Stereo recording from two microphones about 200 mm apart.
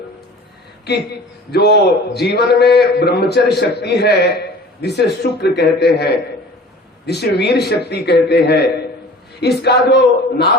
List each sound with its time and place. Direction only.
0.9 s a man's voice: 55° left (ahead or behind)